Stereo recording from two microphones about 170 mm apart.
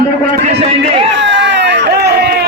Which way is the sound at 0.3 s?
50° right (ahead or behind).